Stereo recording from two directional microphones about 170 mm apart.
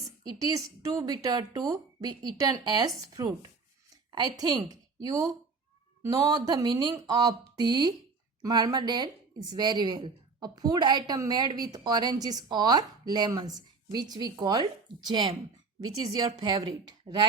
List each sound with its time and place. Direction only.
0.0 s speech: 20° right (ahead or behind)
4.1 s a woman's voice: 25° right (ahead or behind)